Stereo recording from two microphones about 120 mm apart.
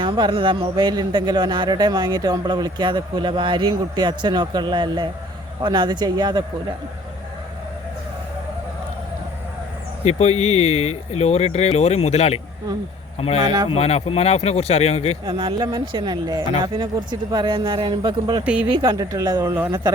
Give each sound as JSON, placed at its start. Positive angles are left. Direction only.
{"t": 0.0, "sound": "speech", "side_deg": -45}
{"t": 10.0, "sound": "speech", "side_deg": 65}
{"t": 15.3, "sound": "speech", "side_deg": -40}